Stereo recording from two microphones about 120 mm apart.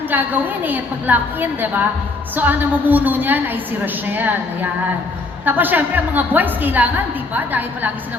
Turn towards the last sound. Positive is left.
turn(degrees=-15)  # may be behind; listen again after turning